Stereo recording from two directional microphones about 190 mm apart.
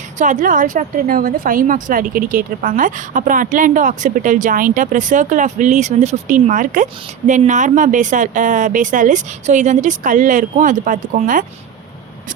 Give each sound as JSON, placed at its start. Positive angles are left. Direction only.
{"t": 0.2, "sound": "a woman's voice", "side_deg": -40}